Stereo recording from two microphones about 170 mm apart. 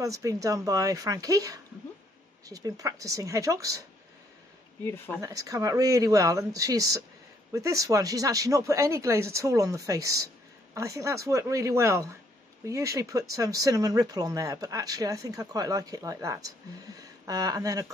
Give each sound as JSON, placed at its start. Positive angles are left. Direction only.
{"t": 0.0, "sound": "speech", "side_deg": -20}
{"t": 4.8, "sound": "speech", "side_deg": 15}
{"t": 5.2, "sound": "speech", "side_deg": -20}